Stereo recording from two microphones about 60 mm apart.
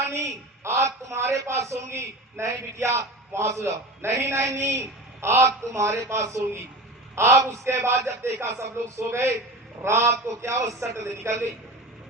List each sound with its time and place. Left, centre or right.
0.0 s a woman's voice: right